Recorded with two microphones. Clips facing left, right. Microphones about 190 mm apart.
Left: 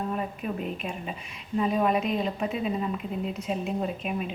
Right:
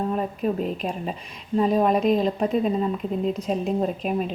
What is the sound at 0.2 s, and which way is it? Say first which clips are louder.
A woman's voice: right 7 dB; 35° right (ahead or behind).